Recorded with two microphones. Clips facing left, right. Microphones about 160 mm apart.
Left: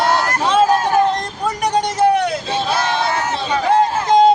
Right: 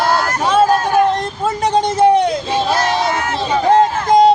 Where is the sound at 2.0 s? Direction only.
30° right (ahead or behind).